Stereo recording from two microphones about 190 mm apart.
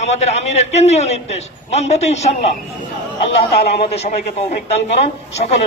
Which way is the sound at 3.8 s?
35° left (ahead or behind).